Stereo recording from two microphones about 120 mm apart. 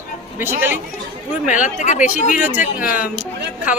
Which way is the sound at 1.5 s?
90° left.